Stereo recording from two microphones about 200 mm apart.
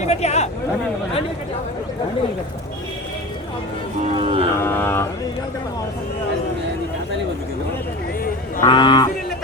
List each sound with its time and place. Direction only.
0.0 s speech: 35° left (ahead or behind)
4.0 s speech: 35° right (ahead or behind)
4.6 s speech: 10° left (ahead or behind)
8.6 s cattle: 20° left (ahead or behind)